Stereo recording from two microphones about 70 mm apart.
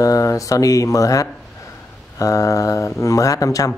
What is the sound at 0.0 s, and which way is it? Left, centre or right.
Speech, left.